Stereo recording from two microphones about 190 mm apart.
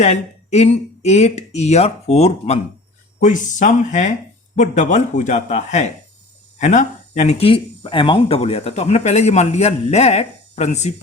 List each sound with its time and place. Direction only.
0.0 s speech: 35° left (ahead or behind)